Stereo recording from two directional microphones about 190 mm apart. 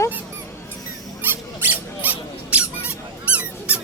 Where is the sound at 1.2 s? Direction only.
10° right (ahead or behind).